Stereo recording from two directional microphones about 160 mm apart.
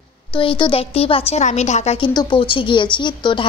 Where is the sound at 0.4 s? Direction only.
30° left (ahead or behind).